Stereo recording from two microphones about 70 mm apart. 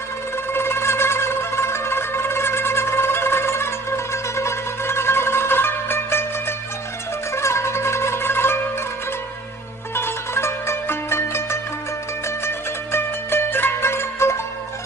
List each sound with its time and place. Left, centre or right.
0.5 s zither: left
7.3 s zither: left
9.9 s zither: left
12.5 s music: left